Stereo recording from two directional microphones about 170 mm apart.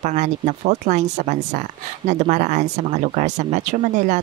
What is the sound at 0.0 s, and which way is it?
Speech, 45° right (ahead or behind).